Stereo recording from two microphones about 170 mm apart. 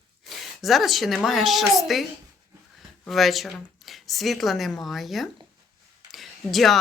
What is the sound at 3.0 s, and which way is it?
A woman's voice, centre (ahead or behind).